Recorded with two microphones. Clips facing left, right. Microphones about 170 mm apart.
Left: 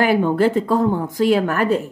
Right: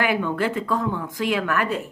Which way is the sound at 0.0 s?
35° left (ahead or behind).